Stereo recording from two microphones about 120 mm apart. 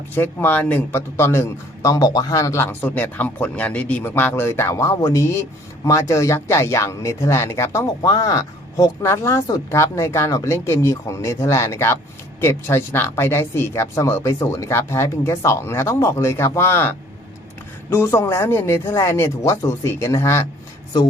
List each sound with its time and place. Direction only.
0.1 s a man's voice: 15° left (ahead or behind)
17.9 s a man's voice: 25° left (ahead or behind)